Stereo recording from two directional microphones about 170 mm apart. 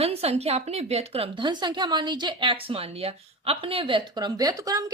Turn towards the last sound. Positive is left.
turn(degrees=-20)  # may be behind; listen again after turning